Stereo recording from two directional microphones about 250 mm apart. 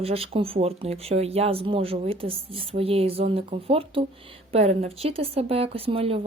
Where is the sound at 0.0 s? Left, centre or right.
Right.